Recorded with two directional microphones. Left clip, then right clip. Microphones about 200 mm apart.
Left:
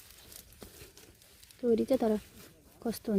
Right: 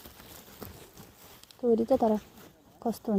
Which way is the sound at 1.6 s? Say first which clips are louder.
Right 3 dB; 10° left (ahead or behind).